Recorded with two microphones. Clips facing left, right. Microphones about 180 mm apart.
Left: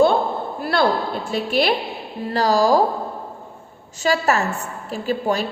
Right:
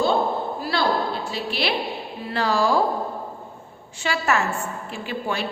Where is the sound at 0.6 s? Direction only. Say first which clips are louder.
Left 5 dB; 55° left (ahead or behind).